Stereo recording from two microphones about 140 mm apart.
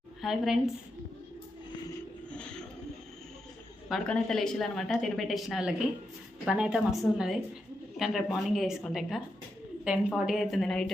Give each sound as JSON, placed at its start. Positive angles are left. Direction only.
{"t": 0.2, "sound": "a woman's voice", "side_deg": 0}
{"t": 2.3, "sound": "bird", "side_deg": 10}
{"t": 3.8, "sound": "a woman's voice", "side_deg": 0}